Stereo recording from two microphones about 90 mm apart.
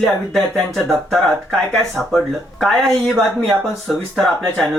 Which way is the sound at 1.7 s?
5° left (ahead or behind).